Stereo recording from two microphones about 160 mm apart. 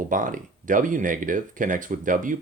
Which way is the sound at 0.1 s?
55° right (ahead or behind).